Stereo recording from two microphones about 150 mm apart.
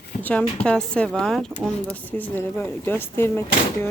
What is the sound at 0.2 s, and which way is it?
Speech, 10° left (ahead or behind).